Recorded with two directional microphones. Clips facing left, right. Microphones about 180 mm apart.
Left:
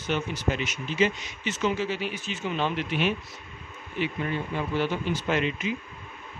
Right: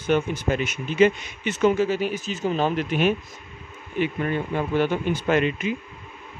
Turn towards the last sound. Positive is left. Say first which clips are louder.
# right 5 dB
turn(degrees=-50)  # may be behind; listen again after turning